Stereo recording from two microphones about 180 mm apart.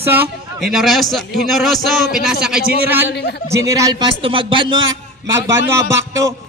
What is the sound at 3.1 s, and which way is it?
Speech, 70° left (ahead or behind).